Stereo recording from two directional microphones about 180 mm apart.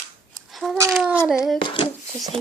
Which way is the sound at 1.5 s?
25° left (ahead or behind).